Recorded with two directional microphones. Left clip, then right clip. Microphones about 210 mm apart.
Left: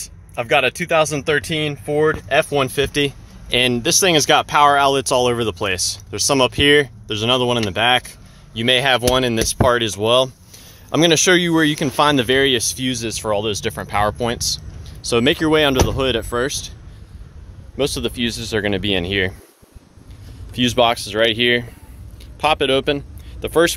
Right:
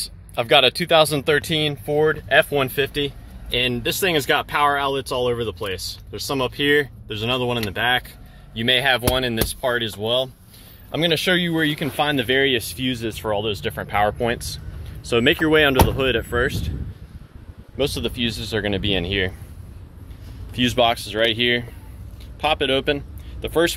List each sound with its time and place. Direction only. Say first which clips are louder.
0.0 s speech: right 1 dB; 5° right (ahead or behind); by 10.3 s 50° left (ahead or behind)
10.9 s speech: left 6 dB; 35° left (ahead or behind)
18.2 s speech: left 3 dB; 35° left (ahead or behind)
20.5 s speech: left 3 dB; 30° left (ahead or behind)